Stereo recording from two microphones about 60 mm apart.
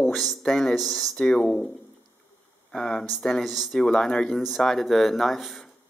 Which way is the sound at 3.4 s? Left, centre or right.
Centre.